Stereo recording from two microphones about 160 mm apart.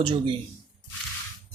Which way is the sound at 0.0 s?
30° right (ahead or behind).